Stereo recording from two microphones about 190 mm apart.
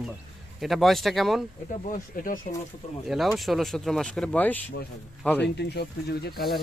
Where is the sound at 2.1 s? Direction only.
45° left (ahead or behind).